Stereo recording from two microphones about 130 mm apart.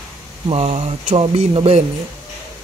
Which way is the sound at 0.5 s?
55° right (ahead or behind).